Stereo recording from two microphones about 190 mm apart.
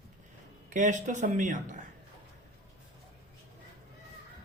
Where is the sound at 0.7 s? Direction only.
40° right (ahead or behind).